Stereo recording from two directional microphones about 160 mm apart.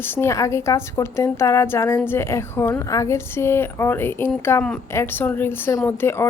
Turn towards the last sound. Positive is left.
turn(degrees=15)  # may be behind; listen again after turning